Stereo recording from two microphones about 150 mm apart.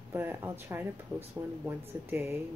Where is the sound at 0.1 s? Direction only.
15° right (ahead or behind).